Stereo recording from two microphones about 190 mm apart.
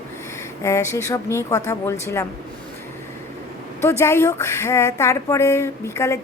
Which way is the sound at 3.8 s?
15° left (ahead or behind).